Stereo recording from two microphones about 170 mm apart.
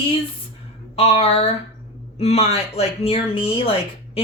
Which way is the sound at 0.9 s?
35° left (ahead or behind).